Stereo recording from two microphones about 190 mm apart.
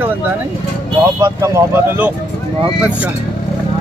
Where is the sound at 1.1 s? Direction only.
15° right (ahead or behind).